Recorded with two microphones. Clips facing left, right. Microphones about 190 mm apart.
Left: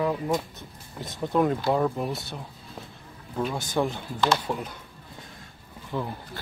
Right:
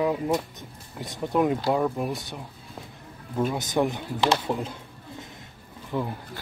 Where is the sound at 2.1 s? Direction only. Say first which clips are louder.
Right 1 dB; 15° right (ahead or behind).